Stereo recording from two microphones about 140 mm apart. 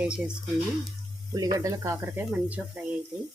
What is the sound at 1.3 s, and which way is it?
Speech, 25° right (ahead or behind).